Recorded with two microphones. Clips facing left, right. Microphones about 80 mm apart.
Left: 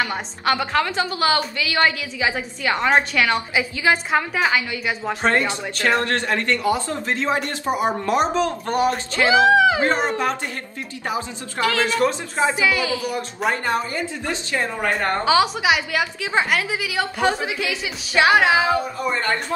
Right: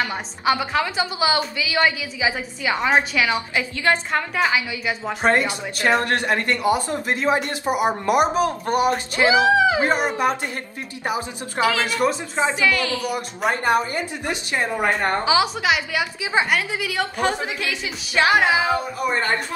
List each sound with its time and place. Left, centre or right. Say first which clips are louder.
0.0 s a woman's voice: even; centre
5.2 s a woman's voice: right 1 dB; centre
12.4 s a woman's voice: left 2 dB; centre
13.0 s a woman's voice: even; centre
13.5 s a woman's voice: right 3 dB; right
15.2 s a woman's voice: left 4 dB; centre
16.0 s a woman's voice: even; centre